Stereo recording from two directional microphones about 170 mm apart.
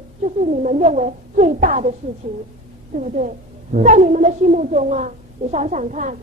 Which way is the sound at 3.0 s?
45° right (ahead or behind).